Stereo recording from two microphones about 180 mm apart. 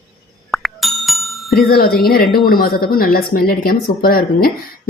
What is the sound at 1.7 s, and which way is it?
Speech, 55° left (ahead or behind).